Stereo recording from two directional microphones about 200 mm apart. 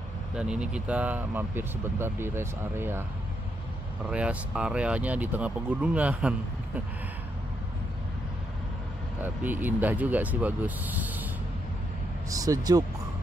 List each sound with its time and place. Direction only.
0.4 s speech: 5° right (ahead or behind)
4.1 s speech: 5° right (ahead or behind)
9.2 s speech: 10° right (ahead or behind)
12.3 s speech: 15° right (ahead or behind)